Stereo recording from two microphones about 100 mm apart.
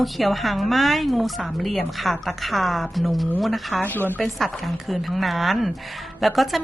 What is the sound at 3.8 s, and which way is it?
Speech, 20° left (ahead or behind).